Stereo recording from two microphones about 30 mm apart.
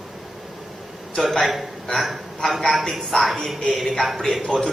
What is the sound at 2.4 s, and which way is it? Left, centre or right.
Speech, centre.